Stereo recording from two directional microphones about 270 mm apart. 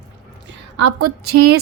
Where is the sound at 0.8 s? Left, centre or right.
Right.